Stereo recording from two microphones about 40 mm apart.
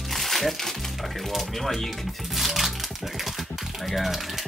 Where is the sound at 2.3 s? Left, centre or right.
Centre.